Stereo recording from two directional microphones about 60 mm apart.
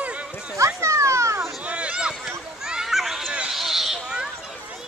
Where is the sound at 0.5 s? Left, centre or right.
Right.